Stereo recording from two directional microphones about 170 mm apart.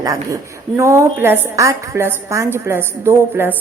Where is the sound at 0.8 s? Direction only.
15° right (ahead or behind).